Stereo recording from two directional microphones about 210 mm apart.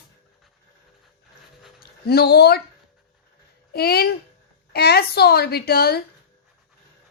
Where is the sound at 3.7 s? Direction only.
50° left (ahead or behind).